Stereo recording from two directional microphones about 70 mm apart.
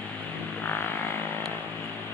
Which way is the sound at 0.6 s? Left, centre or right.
Left.